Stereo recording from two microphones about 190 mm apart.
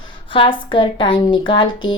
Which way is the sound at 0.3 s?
25° left (ahead or behind).